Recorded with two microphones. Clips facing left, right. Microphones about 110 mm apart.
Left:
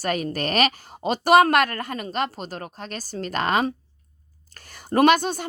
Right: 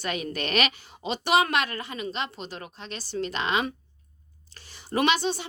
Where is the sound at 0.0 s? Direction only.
40° left (ahead or behind).